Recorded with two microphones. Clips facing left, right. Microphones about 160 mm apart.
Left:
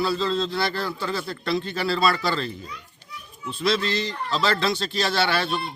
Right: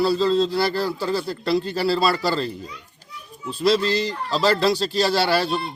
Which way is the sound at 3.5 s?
35° right (ahead or behind).